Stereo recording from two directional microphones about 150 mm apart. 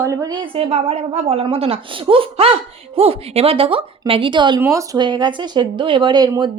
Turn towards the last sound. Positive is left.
turn(degrees=-30)  # may be behind; listen again after turning